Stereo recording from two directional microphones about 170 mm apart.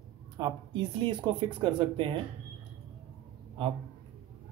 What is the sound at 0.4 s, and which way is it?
Speech, 30° right (ahead or behind).